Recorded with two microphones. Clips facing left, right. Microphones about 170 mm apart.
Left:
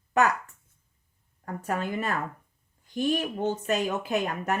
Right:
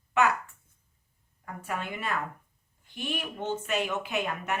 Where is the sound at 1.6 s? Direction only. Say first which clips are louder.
Left 5 dB; 40° left (ahead or behind).